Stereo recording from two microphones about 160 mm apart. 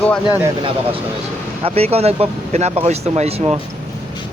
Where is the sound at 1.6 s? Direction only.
40° right (ahead or behind).